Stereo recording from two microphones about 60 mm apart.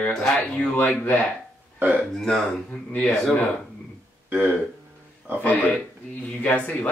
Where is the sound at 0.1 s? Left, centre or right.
Centre.